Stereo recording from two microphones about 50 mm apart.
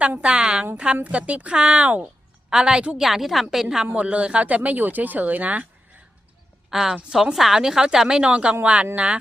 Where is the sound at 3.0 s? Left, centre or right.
Centre.